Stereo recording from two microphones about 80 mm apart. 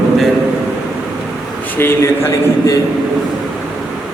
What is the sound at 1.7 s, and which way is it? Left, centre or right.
Speech, left.